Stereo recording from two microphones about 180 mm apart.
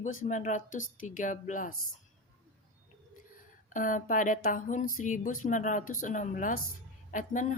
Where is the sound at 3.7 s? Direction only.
45° left (ahead or behind).